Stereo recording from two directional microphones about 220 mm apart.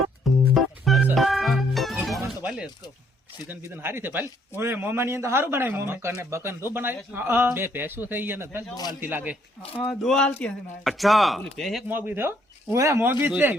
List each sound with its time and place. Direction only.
0.5 s organ: centre (ahead or behind)
3.4 s a man's voice: 10° right (ahead or behind)
8.7 s a man's voice: 15° left (ahead or behind)
9.0 s a man's voice: 10° right (ahead or behind)
9.8 s a man's voice: 5° left (ahead or behind)